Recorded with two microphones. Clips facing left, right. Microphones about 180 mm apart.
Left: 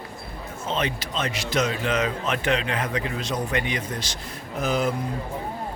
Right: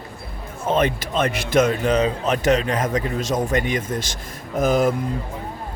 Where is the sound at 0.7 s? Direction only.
50° right (ahead or behind).